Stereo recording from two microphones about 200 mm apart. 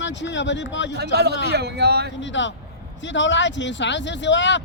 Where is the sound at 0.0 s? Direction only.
65° left (ahead or behind).